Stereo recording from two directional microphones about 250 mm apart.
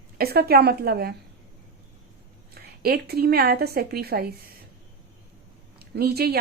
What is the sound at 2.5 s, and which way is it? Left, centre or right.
A woman's voice, right.